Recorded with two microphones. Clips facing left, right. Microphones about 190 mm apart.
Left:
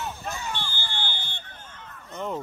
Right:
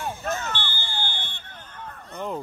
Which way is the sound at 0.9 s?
50° right (ahead or behind).